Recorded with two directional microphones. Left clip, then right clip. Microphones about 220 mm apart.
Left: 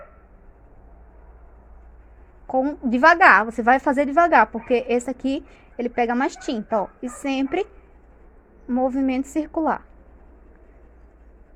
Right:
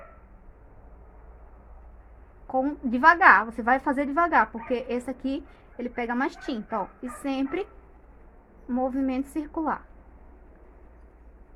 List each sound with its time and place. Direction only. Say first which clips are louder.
2.5 s a woman's voice: left 5 dB; 25° left (ahead or behind)